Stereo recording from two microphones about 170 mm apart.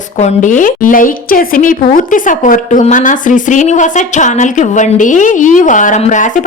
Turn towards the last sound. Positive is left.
turn(degrees=50)  # may be behind; listen again after turning